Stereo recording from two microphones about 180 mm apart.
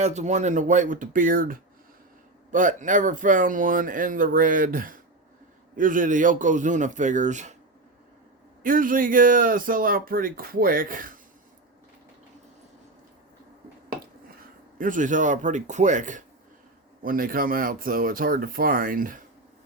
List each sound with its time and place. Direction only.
0.0 s speech: 40° right (ahead or behind)
8.6 s speech: 50° right (ahead or behind)
14.8 s speech: 45° right (ahead or behind)